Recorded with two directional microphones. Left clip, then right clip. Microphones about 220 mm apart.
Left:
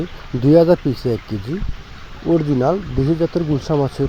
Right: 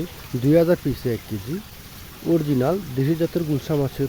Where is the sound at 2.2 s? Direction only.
Centre (ahead or behind).